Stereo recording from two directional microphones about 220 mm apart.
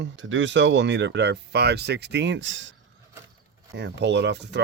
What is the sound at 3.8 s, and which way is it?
Speech, 50° right (ahead or behind).